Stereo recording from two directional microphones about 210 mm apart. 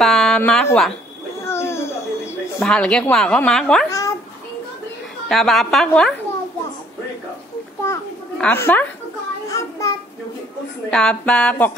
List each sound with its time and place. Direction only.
0.0 s a woman's voice: centre (ahead or behind)
1.4 s baby cry: 10° left (ahead or behind)
2.6 s a woman's voice: 5° left (ahead or behind)
5.3 s a woman's voice: centre (ahead or behind)
7.8 s children playing: 10° left (ahead or behind)
9.5 s child singing: 15° left (ahead or behind)
10.9 s a woman's voice: 5° left (ahead or behind)